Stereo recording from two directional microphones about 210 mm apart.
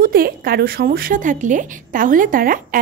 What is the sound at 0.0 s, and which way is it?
A woman's voice, 45° right (ahead or behind).